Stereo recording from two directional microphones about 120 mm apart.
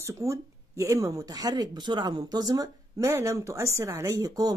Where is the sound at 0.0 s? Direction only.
25° right (ahead or behind).